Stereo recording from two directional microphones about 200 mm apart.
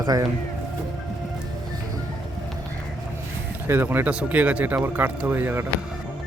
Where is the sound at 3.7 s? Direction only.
10° right (ahead or behind).